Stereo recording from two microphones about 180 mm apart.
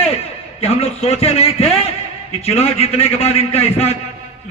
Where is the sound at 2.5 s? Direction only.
35° left (ahead or behind).